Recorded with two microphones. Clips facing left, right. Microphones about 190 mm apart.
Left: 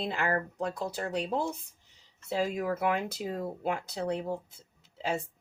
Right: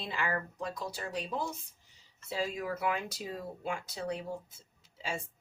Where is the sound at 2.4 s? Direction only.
50° left (ahead or behind).